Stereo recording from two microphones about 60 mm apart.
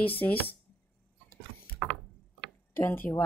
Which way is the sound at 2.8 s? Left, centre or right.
Left.